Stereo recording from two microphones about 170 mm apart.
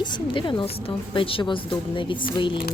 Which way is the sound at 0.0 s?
25° left (ahead or behind).